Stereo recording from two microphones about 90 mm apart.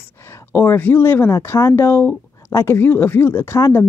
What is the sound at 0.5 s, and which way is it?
Speech, 25° left (ahead or behind).